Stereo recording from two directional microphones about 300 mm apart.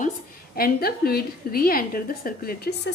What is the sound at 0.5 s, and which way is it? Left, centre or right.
A woman's voice, left.